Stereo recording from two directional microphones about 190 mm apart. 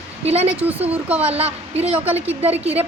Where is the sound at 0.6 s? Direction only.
10° right (ahead or behind).